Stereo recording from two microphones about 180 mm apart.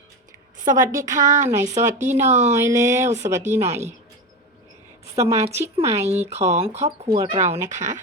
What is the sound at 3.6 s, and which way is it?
Speech, 40° right (ahead or behind).